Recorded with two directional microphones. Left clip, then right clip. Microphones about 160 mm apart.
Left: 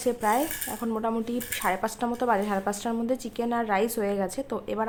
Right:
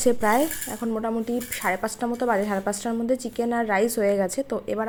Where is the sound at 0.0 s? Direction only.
30° right (ahead or behind).